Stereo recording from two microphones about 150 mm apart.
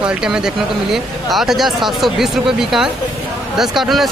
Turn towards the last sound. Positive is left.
turn(degrees=0)  # may be behind; listen again after turning